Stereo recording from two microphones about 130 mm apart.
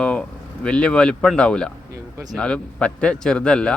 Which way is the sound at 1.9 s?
25° right (ahead or behind).